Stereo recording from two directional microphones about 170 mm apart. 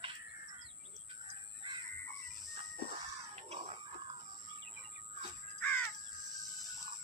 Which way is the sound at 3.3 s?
40° right (ahead or behind).